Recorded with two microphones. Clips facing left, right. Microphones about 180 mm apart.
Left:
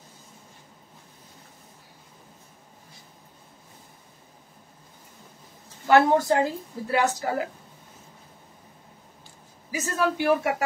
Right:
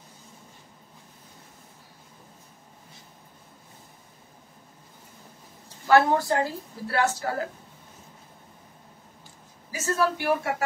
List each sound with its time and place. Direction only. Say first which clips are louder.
5.9 s a woman's voice: left 1 dB; 20° left (ahead or behind)
9.7 s a woman's voice: even; 15° left (ahead or behind)